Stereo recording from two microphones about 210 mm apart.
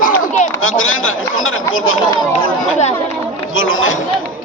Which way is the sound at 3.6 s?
70° left (ahead or behind).